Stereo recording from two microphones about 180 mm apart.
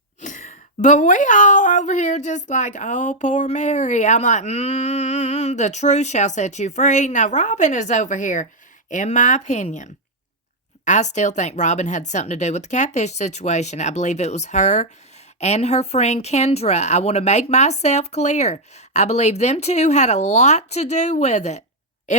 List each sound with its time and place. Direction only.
0.2 s speech: 45° left (ahead or behind)